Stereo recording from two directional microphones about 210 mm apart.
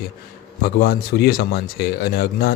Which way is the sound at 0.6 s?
50° left (ahead or behind).